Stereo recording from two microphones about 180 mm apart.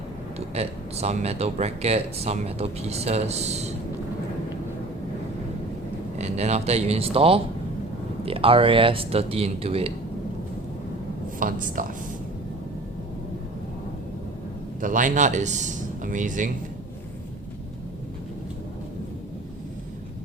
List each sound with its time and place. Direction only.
0.3 s speech: 35° right (ahead or behind)
6.1 s speech: 40° right (ahead or behind)
11.3 s a man's voice: 50° right (ahead or behind)
14.8 s a man's voice: 45° right (ahead or behind)